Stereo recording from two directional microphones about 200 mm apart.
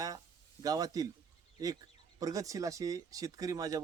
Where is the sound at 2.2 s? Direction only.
15° right (ahead or behind).